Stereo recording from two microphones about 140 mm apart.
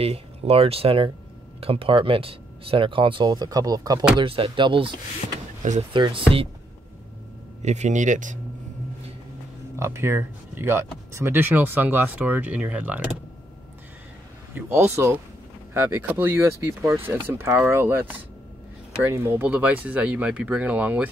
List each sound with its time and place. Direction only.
0.0 s speech: 45° right (ahead or behind); by 4.0 s 25° right (ahead or behind)
4.2 s speech: 40° right (ahead or behind)
5.6 s speech: 60° right (ahead or behind)
5.9 s speech: 35° right (ahead or behind)
7.6 s a man's voice: 55° right (ahead or behind)
9.8 s speech: 20° right (ahead or behind)
14.5 s speech: 15° right (ahead or behind)
19.0 s speech: 15° right (ahead or behind)